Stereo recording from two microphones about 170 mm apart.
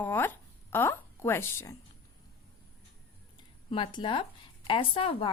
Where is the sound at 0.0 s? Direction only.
10° left (ahead or behind).